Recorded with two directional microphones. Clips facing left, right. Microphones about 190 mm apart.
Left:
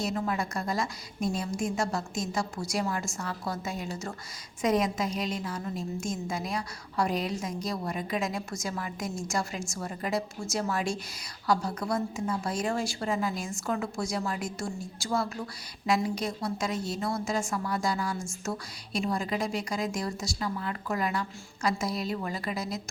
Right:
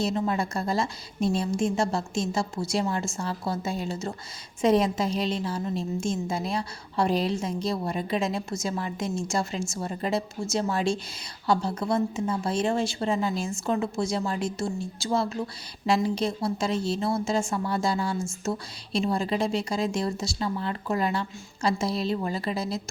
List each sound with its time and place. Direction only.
0.0 s speech: 25° right (ahead or behind)